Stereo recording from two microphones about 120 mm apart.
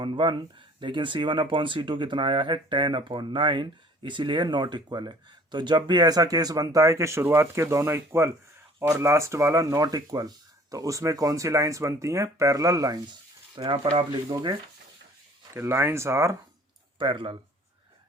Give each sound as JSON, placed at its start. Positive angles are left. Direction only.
{"t": 0.0, "sound": "speech", "side_deg": -40}
{"t": 15.5, "sound": "speech", "side_deg": -20}
{"t": 17.0, "sound": "speech", "side_deg": -45}